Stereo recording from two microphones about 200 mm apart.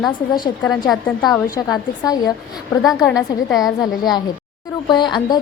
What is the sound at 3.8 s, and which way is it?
A woman's voice, 20° left (ahead or behind).